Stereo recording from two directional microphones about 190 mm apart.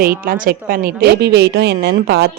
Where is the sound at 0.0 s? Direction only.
50° right (ahead or behind).